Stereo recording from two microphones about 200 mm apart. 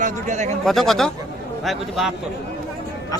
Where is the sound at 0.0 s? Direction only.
35° right (ahead or behind).